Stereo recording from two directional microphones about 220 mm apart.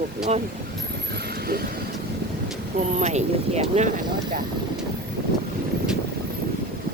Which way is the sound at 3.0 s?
30° right (ahead or behind).